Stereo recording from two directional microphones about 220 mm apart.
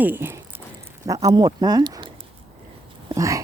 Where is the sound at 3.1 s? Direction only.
15° right (ahead or behind).